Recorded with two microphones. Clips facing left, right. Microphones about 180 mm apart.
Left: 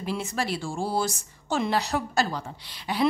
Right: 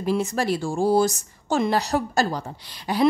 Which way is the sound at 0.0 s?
45° right (ahead or behind).